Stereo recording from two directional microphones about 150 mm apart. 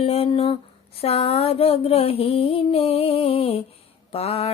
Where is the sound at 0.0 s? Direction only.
40° left (ahead or behind).